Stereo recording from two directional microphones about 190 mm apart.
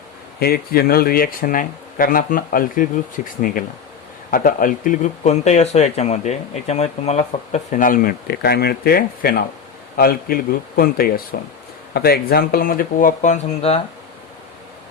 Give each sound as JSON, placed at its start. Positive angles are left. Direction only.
{"t": 0.3, "sound": "speech", "side_deg": 55}